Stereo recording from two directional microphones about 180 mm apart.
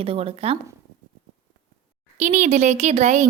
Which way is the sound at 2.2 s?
40° right (ahead or behind).